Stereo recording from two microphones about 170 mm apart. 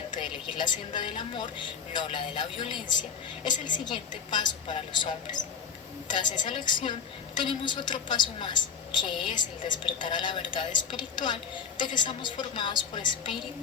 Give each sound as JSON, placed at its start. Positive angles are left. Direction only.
{"t": 0.1, "sound": "a woman's voice", "side_deg": 25}